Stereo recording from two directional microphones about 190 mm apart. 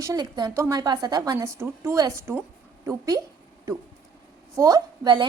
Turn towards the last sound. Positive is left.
turn(degrees=-25)  # may be behind; listen again after turning